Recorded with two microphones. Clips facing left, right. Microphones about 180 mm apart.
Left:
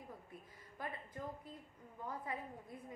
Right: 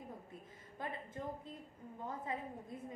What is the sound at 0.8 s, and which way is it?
A woman's voice, 25° right (ahead or behind).